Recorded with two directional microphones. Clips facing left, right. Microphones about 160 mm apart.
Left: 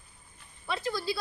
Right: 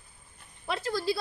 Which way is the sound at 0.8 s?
40° right (ahead or behind).